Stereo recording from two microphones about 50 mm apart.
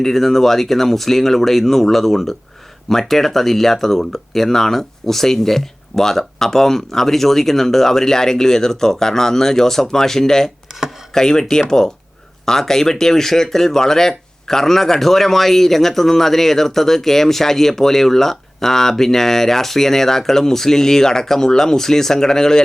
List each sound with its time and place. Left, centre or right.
0.0 s speech: centre